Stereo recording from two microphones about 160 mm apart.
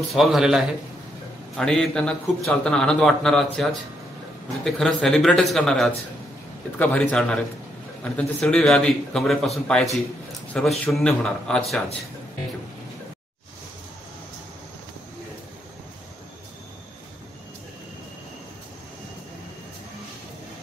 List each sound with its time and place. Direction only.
0.0 s speech: centre (ahead or behind)
4.6 s a man's voice: centre (ahead or behind)